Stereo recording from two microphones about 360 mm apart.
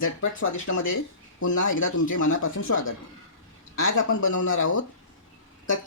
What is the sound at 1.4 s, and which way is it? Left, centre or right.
Speech, left.